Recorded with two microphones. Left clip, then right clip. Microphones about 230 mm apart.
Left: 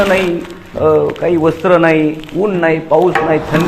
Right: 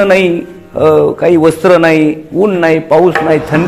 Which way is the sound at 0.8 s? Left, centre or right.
Right.